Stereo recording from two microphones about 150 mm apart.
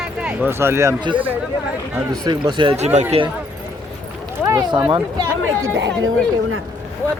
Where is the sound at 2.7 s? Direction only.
45° right (ahead or behind).